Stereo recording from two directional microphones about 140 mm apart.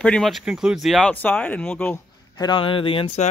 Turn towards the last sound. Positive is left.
turn(degrees=40)  # may be behind; listen again after turning